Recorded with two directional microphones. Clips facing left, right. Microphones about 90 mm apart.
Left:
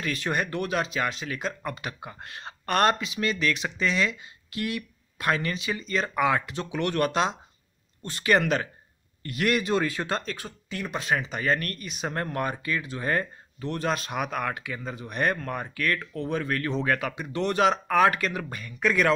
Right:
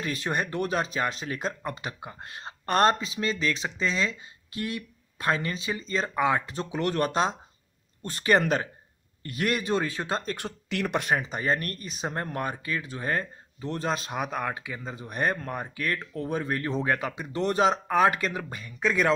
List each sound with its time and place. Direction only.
0.0 s speech: 25° right (ahead or behind)
9.9 s speech: 20° right (ahead or behind)
10.3 s speech: 70° right (ahead or behind)
11.1 s speech: 40° right (ahead or behind)
12.3 s speech: 5° right (ahead or behind)
13.7 s speech: 25° right (ahead or behind)
15.4 s speech: 10° right (ahead or behind)
17.3 s speech: 35° right (ahead or behind)